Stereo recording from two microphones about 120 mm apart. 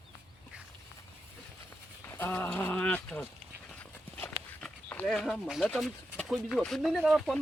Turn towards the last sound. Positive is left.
turn(degrees=0)  # may be behind; listen again after turning